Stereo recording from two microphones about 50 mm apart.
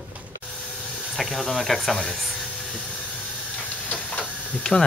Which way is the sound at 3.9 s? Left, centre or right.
Left.